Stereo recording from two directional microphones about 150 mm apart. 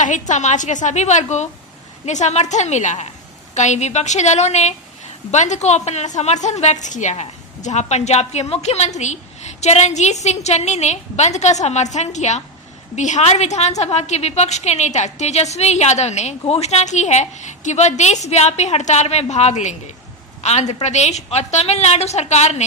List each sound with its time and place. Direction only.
0.0 s a woman's voice: 55° left (ahead or behind)